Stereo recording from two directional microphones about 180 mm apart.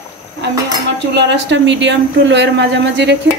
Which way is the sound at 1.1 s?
75° right (ahead or behind).